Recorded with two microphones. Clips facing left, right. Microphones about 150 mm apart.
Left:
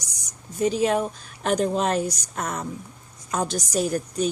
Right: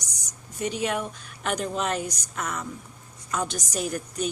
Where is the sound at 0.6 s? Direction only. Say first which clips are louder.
Left 6 dB; 35° left (ahead or behind).